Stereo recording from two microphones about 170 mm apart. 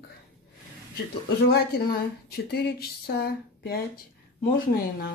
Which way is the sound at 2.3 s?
70° left (ahead or behind).